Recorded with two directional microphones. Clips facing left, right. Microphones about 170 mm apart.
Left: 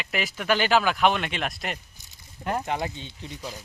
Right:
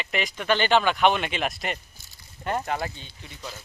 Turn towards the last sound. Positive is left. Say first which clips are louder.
# left 3 dB
turn(degrees=15)  # may be behind; listen again after turning